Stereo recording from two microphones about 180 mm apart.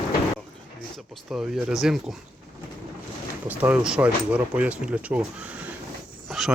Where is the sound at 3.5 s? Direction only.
10° right (ahead or behind).